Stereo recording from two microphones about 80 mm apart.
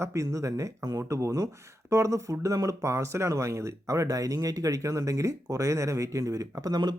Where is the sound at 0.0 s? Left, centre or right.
Right.